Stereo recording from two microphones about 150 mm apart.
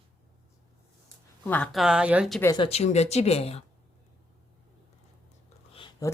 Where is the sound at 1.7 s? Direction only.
5° right (ahead or behind).